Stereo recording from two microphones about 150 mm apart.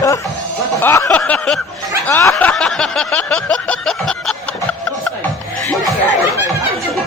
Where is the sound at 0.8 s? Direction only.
15° left (ahead or behind).